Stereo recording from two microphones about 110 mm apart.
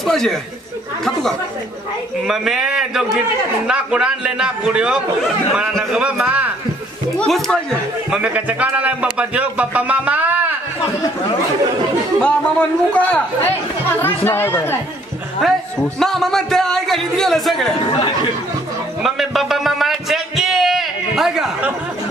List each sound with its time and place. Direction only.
0.0 s speech: 5° left (ahead or behind)
2.2 s a man's voice: 5° right (ahead or behind)
5.9 s a man's voice: 10° right (ahead or behind)
7.2 s a man's voice: 5° left (ahead or behind)
8.1 s speech: 10° right (ahead or behind)
12.2 s a man's voice: 10° left (ahead or behind)
15.4 s a man's voice: centre (ahead or behind)
19.0 s a sound: centre (ahead or behind)